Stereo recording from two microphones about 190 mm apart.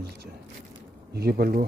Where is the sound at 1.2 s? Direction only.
55° right (ahead or behind).